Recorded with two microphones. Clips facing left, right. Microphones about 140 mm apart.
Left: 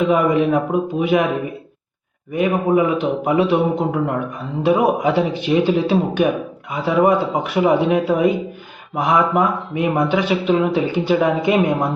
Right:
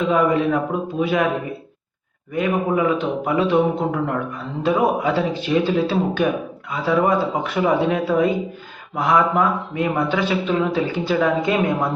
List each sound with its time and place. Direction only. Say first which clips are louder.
0.1 s speech: left 2 dB; 15° left (ahead or behind)
2.3 s speech: left 3 dB; 20° left (ahead or behind)